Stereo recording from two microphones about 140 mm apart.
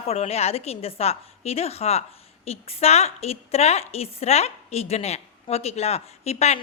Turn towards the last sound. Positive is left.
turn(degrees=50)  # may be behind; listen again after turning